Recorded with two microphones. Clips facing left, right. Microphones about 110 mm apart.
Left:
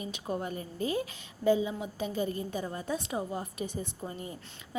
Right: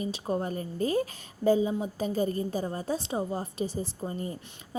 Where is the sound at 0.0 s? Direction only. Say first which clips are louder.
Right 5 dB; 35° right (ahead or behind).